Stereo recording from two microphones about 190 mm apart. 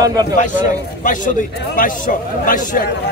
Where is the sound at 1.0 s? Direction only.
45° left (ahead or behind).